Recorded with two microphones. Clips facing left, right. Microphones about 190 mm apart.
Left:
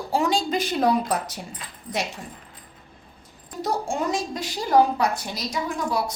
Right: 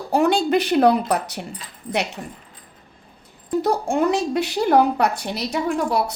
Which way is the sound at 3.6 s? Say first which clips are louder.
Right 5 dB; 60° right (ahead or behind).